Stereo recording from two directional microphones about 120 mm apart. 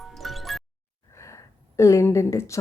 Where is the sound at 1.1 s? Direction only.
25° left (ahead or behind).